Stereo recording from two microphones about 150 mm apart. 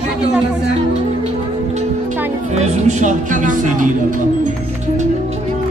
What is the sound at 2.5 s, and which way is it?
Speech, 50° right (ahead or behind).